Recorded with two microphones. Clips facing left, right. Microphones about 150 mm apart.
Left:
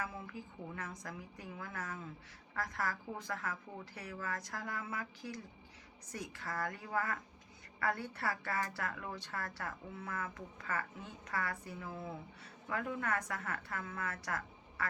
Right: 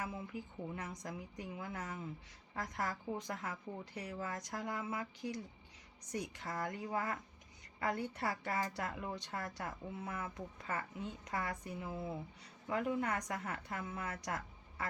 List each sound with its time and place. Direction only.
0.0 s a woman's voice: 20° right (ahead or behind)